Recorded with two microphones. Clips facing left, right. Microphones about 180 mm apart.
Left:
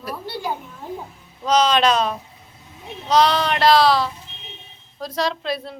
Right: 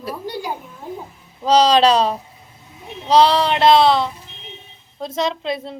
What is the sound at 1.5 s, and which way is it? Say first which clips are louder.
A woman's voice: right 4 dB; 35° right (ahead or behind).